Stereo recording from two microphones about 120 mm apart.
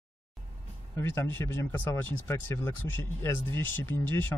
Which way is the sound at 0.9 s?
20° left (ahead or behind).